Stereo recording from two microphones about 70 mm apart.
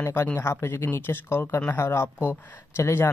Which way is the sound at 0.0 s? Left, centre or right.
Left.